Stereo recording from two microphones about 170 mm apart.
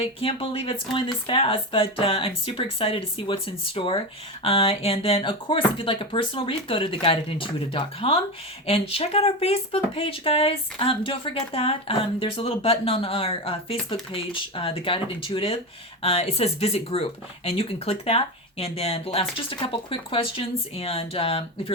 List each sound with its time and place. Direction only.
0.0 s speech: 35° left (ahead or behind)